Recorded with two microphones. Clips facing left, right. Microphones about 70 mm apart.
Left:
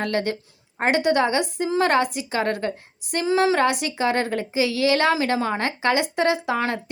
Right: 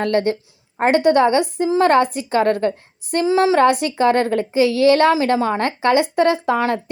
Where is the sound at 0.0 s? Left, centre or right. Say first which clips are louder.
Right 6 dB; right.